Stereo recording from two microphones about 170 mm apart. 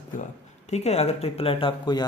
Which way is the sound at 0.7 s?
40° left (ahead or behind).